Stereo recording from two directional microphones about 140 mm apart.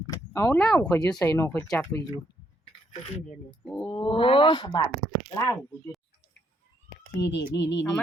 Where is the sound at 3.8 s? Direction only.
35° left (ahead or behind).